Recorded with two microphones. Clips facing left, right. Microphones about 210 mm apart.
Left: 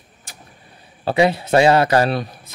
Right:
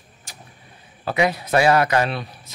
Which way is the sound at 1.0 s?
30° left (ahead or behind).